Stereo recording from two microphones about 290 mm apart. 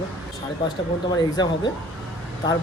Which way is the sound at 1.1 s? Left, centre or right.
Centre.